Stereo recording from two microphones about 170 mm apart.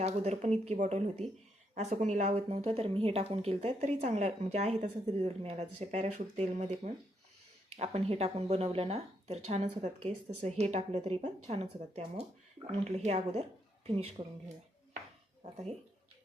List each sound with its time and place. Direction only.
0.0 s speech: 40° right (ahead or behind)